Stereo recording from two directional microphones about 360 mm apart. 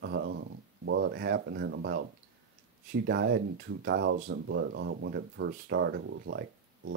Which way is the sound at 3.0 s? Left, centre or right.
Right.